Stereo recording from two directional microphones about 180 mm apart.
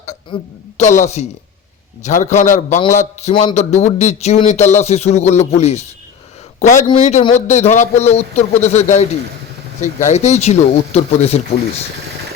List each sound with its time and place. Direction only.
0.3 s a woman's voice: 25° left (ahead or behind)
0.8 s a man's voice: 40° left (ahead or behind)